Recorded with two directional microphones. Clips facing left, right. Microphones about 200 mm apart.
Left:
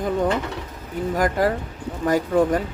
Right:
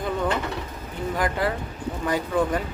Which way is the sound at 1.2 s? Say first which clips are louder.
Left 5 dB; 45° left (ahead or behind).